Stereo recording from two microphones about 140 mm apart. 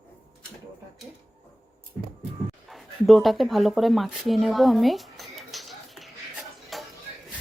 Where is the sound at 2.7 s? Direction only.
Centre (ahead or behind).